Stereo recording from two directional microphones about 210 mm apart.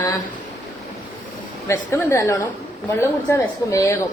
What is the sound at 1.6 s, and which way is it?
A woman's voice, 10° left (ahead or behind).